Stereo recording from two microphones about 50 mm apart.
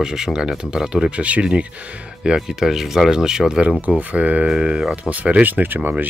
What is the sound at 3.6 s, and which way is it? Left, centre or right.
Speech, right.